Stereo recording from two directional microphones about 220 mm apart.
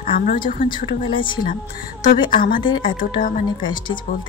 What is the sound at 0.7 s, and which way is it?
Speech, 20° left (ahead or behind).